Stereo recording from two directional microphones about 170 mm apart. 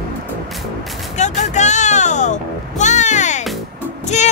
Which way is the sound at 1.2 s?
45° left (ahead or behind).